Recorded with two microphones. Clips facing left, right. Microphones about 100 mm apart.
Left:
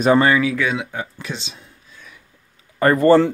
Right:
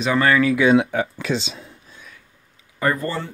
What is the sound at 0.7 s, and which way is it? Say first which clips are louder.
Speech: right 9 dB; 90° right.